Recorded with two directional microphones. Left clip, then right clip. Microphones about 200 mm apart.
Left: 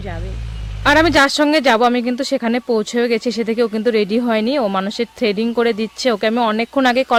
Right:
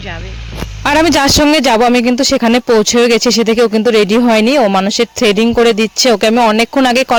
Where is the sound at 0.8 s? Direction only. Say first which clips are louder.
Right 2 dB; 40° right (ahead or behind).